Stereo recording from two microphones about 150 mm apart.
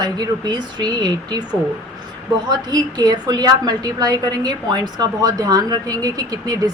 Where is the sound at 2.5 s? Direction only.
25° right (ahead or behind).